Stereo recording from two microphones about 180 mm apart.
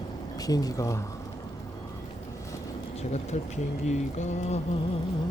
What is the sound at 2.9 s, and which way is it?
Speech, 40° left (ahead or behind).